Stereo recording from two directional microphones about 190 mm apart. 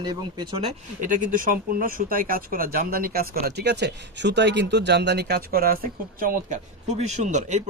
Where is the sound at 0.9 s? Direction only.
45° right (ahead or behind).